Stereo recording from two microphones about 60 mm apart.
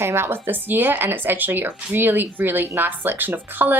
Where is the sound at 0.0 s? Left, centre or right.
Right.